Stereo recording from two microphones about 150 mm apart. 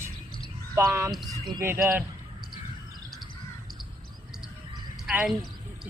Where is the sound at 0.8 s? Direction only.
20° right (ahead or behind).